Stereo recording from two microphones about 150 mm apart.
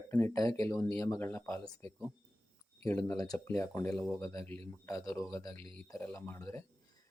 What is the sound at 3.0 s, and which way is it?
Speech, 25° left (ahead or behind).